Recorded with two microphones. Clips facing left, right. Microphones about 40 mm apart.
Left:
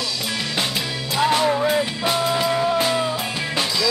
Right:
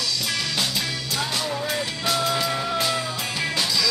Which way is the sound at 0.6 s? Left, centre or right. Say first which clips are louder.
Left 2 dB; left.